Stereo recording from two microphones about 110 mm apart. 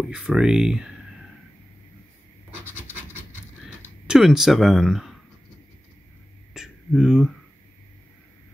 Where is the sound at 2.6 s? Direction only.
20° right (ahead or behind).